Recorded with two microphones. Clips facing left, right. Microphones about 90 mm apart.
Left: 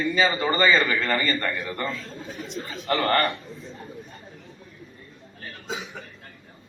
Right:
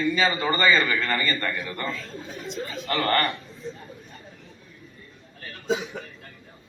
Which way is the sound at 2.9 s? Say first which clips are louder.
Left 2 dB; 30° left (ahead or behind).